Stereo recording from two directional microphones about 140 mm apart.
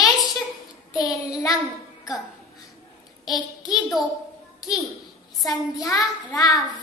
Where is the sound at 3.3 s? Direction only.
30° left (ahead or behind).